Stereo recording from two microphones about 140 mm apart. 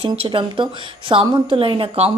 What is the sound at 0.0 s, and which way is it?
A woman's voice, 40° right (ahead or behind).